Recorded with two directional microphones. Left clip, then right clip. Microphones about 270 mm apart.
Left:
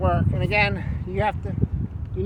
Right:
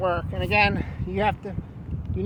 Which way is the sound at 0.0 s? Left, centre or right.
Right.